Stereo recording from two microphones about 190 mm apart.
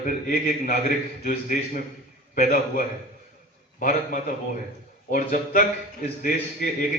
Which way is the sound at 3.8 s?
45° left (ahead or behind).